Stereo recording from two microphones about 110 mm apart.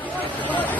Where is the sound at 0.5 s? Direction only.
15° left (ahead or behind).